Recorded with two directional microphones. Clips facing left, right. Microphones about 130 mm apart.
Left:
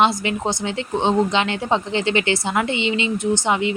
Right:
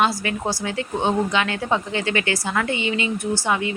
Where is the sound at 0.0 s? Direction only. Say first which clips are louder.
Left 3 dB; 20° left (ahead or behind).